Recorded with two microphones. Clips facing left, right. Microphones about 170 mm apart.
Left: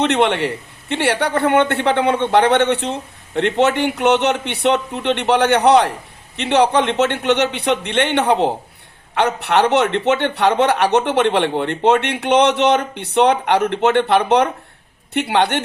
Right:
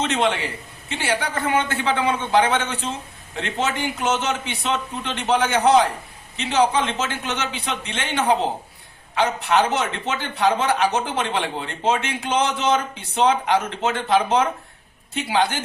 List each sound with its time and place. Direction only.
0.0 s a man's voice: 65° left (ahead or behind)